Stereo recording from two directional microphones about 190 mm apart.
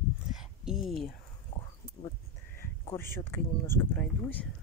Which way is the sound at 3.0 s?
10° left (ahead or behind).